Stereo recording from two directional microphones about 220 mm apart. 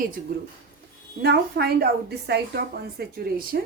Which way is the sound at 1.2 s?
45° right (ahead or behind).